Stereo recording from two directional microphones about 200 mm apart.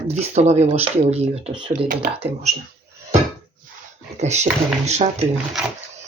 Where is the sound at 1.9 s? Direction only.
45° right (ahead or behind).